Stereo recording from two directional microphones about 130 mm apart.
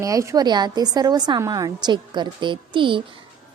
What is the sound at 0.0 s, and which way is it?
A woman's voice, 25° right (ahead or behind).